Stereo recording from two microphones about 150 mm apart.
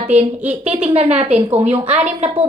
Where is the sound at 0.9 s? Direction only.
45° right (ahead or behind).